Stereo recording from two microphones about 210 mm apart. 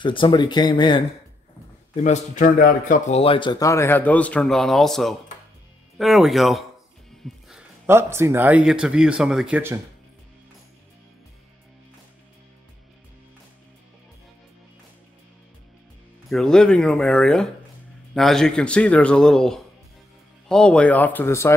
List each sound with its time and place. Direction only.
0.0 s speech: 25° left (ahead or behind)
2.0 s speech: 35° left (ahead or behind); by 9.8 s 10° right (ahead or behind)
16.3 s speech: centre (ahead or behind)